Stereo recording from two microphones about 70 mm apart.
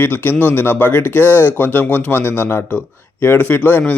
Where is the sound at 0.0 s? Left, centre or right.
Left.